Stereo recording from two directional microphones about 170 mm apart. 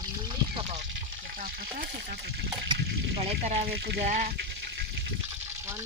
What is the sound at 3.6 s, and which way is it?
Speech, 70° right (ahead or behind).